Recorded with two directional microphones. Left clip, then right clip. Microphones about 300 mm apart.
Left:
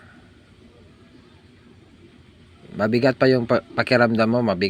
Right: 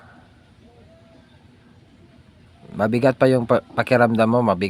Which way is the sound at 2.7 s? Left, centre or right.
Centre.